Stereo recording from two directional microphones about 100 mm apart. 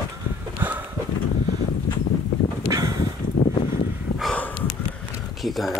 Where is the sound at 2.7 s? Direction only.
35° right (ahead or behind).